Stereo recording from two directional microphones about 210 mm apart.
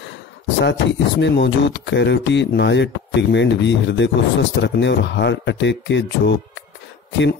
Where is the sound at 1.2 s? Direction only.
60° left (ahead or behind).